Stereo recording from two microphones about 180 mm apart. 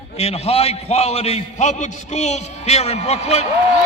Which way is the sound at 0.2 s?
35° left (ahead or behind).